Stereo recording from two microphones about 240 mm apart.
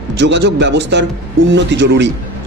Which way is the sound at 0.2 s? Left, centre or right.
Right.